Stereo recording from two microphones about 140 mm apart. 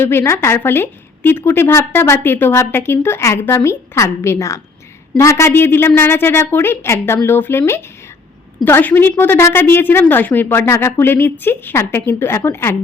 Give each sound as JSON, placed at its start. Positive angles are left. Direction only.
{"t": 0.0, "sound": "a woman's voice", "side_deg": 15}